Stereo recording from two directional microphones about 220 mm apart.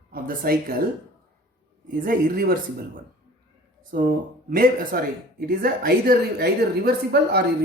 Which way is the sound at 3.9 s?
45° right (ahead or behind).